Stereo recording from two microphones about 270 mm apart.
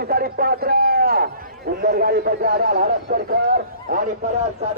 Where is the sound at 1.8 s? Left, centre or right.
Right.